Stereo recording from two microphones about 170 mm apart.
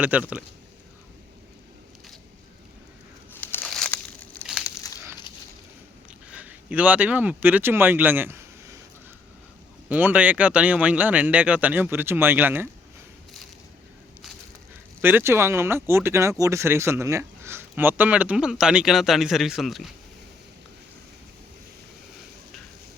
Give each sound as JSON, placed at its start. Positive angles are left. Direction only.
{"t": 0.0, "sound": "speech", "side_deg": -10}
{"t": 3.3, "sound": "crumpling", "side_deg": 10}
{"t": 6.3, "sound": "speech", "side_deg": -10}
{"t": 9.9, "sound": "speech", "side_deg": -10}
{"t": 15.0, "sound": "speech", "side_deg": -15}